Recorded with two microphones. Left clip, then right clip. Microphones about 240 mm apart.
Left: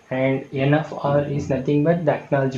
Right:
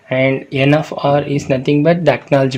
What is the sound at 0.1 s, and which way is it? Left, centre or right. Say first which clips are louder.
Speech: right 7 dB; right.